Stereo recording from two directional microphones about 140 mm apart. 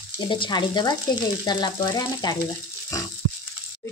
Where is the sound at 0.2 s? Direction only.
35° left (ahead or behind).